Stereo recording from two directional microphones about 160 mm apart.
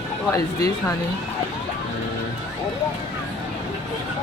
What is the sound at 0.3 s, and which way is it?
Speech, 20° left (ahead or behind).